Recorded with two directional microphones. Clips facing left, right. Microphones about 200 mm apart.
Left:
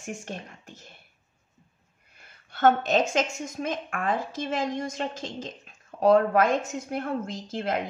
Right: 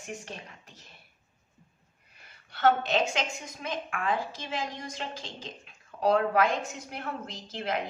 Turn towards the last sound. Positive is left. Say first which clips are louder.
# left 4 dB
turn(degrees=50)  # may be behind; listen again after turning